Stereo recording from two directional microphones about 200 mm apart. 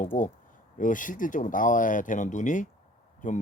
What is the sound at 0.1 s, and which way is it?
Speech, 40° left (ahead or behind).